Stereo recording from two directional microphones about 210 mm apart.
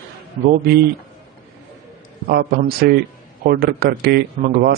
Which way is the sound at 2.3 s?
50° right (ahead or behind).